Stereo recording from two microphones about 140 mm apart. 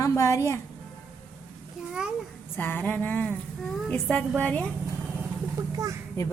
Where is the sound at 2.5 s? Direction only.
15° left (ahead or behind).